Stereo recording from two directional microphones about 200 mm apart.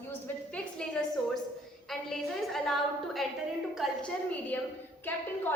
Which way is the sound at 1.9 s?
Centre (ahead or behind).